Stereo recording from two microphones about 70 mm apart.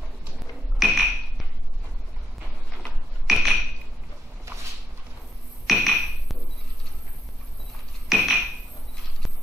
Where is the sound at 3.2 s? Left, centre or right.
Centre.